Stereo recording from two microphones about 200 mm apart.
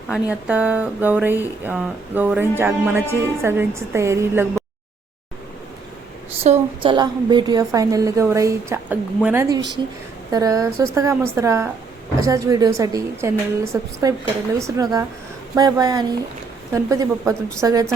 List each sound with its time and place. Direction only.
0.1 s speech: 5° right (ahead or behind)
6.4 s speech: 30° right (ahead or behind)